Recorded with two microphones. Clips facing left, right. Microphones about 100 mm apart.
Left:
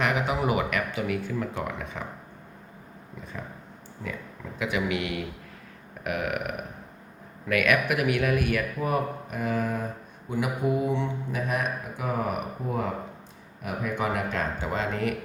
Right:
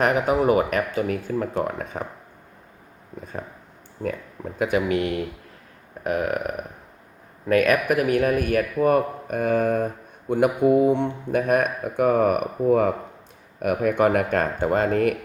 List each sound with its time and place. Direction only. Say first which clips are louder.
0.0 s speech: right 6 dB; 45° right (ahead or behind)
4.0 s speech: right 8 dB; 45° right (ahead or behind)